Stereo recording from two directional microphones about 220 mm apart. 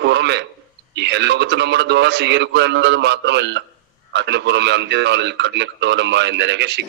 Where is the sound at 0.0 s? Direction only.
50° right (ahead or behind).